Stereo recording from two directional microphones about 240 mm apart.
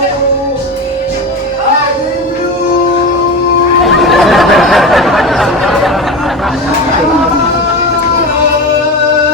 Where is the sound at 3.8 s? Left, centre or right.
Centre.